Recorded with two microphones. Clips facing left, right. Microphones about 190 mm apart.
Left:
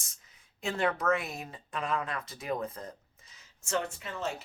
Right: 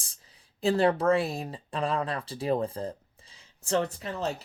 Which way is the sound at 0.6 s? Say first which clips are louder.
Right 7 dB; 35° right (ahead or behind).